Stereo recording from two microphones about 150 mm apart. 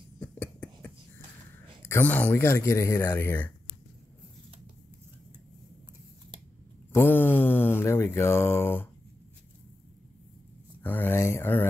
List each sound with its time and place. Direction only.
0.2 s a sound: 10° left (ahead or behind)
1.8 s speech: 15° left (ahead or behind)
6.9 s speech: 15° left (ahead or behind)
10.8 s speech: 10° left (ahead or behind)